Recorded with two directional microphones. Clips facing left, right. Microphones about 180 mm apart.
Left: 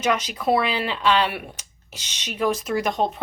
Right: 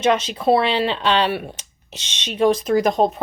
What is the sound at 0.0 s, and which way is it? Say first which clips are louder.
A woman's voice: right 5 dB; 25° right (ahead or behind).